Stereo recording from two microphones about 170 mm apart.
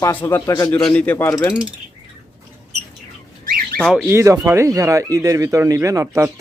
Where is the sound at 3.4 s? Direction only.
55° right (ahead or behind).